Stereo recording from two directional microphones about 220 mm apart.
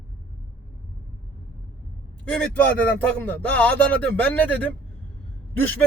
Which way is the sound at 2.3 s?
5° left (ahead or behind).